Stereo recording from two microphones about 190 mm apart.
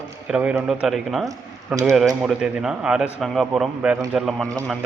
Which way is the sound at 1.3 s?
20° right (ahead or behind).